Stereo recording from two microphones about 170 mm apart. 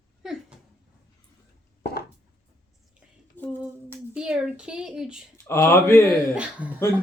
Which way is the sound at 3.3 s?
10° left (ahead or behind).